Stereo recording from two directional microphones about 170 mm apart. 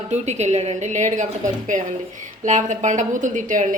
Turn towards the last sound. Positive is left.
turn(degrees=-50)  # may be behind; listen again after turning